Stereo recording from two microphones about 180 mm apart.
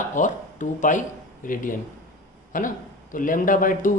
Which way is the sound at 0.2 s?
45° left (ahead or behind).